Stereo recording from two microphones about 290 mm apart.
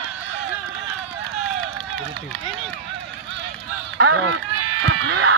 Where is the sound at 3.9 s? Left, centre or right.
Right.